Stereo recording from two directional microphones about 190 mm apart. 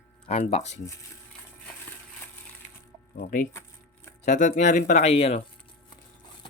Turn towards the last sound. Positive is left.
turn(degrees=35)  # may be behind; listen again after turning